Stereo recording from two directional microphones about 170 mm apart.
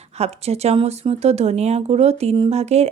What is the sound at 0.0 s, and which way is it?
Speech, 40° right (ahead or behind).